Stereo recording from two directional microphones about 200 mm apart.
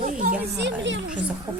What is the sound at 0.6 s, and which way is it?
Speech, 65° right (ahead or behind).